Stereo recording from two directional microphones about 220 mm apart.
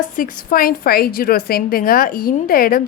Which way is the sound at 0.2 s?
40° left (ahead or behind).